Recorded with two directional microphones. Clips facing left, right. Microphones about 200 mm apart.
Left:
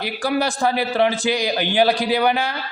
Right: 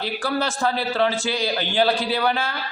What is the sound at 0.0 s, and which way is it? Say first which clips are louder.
A man's voice: left 3 dB; 15° left (ahead or behind).